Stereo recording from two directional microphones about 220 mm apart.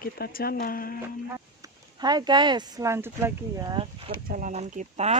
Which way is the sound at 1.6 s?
20° right (ahead or behind).